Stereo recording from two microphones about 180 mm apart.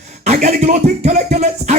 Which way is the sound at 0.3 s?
40° right (ahead or behind).